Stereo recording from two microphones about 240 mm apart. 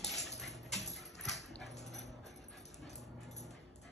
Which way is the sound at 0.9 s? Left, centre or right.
Centre.